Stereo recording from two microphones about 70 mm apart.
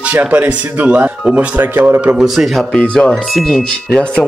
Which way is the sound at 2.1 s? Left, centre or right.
Centre.